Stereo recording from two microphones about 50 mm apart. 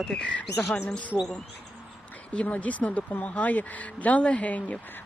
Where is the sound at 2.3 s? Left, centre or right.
Left.